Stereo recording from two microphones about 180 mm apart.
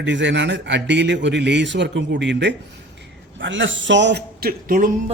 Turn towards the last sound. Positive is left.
turn(degrees=-55)  # may be behind; listen again after turning